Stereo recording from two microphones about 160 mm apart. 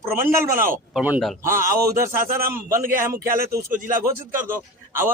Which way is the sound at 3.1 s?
75° right (ahead or behind).